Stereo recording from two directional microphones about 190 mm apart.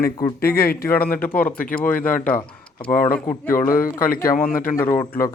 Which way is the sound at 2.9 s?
45° left (ahead or behind).